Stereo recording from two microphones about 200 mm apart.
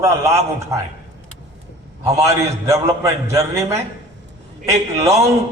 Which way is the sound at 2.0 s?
15° right (ahead or behind).